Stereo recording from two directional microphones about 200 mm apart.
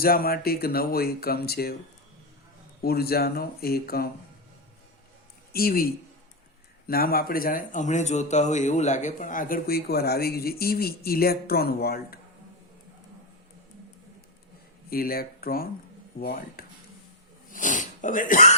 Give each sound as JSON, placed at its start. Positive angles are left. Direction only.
{"t": 0.0, "sound": "a man's voice", "side_deg": 50}
{"t": 2.8, "sound": "a man's voice", "side_deg": 50}
{"t": 5.5, "sound": "a man's voice", "side_deg": 50}
{"t": 14.8, "sound": "a man's voice", "side_deg": 50}
{"t": 17.5, "sound": "a sound", "side_deg": 40}